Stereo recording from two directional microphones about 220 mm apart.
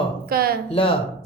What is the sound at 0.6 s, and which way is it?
Speech, 25° left (ahead or behind).